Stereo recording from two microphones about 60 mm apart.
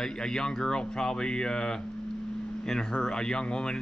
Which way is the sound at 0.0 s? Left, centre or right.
Centre.